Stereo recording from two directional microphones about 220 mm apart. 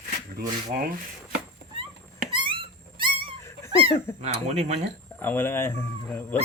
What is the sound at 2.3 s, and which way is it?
Dog, 25° right (ahead or behind).